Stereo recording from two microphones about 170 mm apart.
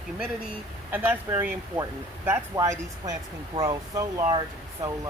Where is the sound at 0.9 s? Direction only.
10° right (ahead or behind).